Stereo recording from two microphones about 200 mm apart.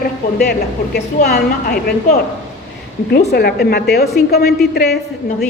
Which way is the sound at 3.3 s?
55° left (ahead or behind).